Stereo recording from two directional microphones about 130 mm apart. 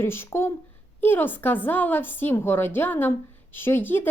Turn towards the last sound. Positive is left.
turn(degrees=15)  # may be behind; listen again after turning